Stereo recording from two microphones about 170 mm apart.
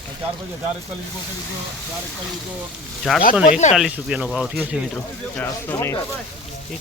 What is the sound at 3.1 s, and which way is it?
Speech, centre (ahead or behind).